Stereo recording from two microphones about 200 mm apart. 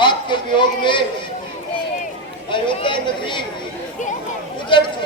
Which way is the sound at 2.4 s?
25° left (ahead or behind).